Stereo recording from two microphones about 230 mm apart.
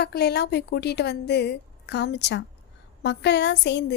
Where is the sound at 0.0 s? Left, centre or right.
Left.